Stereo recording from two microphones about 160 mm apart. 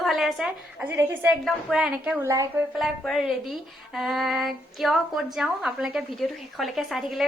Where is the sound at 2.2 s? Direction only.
20° right (ahead or behind).